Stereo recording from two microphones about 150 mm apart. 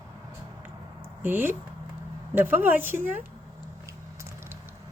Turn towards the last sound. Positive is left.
turn(degrees=-15)  # may be behind; listen again after turning